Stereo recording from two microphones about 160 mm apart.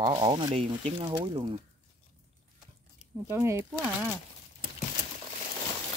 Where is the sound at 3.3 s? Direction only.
15° right (ahead or behind).